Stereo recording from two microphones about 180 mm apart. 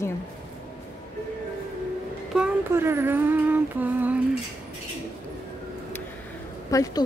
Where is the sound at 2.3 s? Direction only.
10° right (ahead or behind).